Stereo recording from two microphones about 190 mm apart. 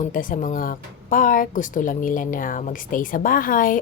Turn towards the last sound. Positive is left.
turn(degrees=45)  # may be behind; listen again after turning